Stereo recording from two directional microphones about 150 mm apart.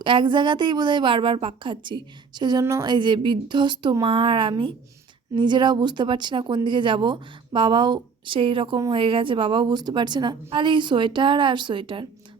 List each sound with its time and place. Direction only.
0.0 s speech: 35° right (ahead or behind)